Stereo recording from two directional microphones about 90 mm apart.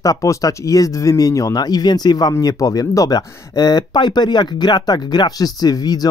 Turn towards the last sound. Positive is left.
turn(degrees=45)  # may be behind; listen again after turning